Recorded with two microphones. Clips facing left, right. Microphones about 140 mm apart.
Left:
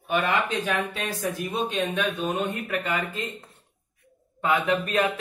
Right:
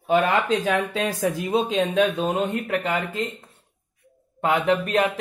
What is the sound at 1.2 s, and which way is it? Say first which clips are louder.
A man's voice: right 5 dB; 90° right.